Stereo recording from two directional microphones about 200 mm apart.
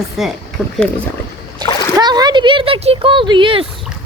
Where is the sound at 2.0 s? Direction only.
20° right (ahead or behind).